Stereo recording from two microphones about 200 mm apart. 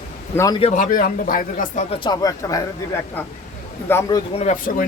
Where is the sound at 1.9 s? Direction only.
20° left (ahead or behind).